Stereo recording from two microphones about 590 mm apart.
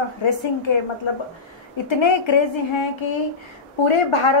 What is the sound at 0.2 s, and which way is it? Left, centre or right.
Speech, left.